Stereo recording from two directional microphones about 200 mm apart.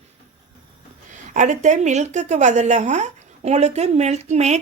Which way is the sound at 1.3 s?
40° right (ahead or behind).